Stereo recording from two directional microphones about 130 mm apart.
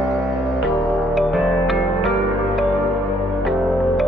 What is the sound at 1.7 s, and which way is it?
Music, centre (ahead or behind).